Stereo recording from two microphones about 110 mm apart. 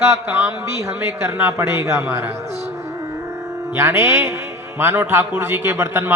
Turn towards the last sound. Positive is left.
turn(degrees=-20)  # may be behind; listen again after turning